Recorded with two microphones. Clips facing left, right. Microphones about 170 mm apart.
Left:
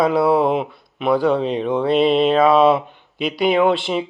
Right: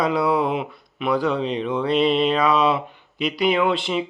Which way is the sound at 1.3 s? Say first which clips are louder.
Left 5 dB; 45° left (ahead or behind).